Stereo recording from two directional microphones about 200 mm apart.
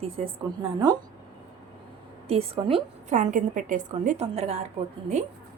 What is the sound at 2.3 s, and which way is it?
Speech, 30° right (ahead or behind).